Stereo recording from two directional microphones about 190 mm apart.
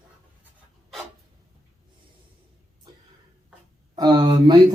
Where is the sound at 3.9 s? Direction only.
20° right (ahead or behind).